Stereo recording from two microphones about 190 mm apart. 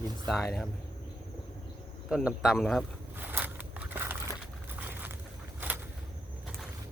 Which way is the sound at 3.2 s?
10° right (ahead or behind).